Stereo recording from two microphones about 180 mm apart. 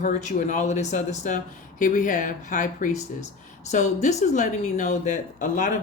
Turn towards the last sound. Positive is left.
turn(degrees=45)  # may be behind; listen again after turning